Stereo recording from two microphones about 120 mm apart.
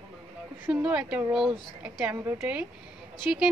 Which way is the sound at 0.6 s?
10° right (ahead or behind).